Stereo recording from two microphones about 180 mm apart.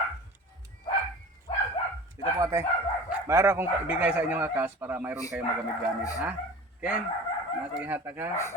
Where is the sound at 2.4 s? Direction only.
15° right (ahead or behind).